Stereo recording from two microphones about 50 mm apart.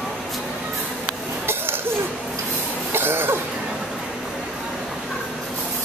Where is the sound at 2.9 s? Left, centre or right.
Right.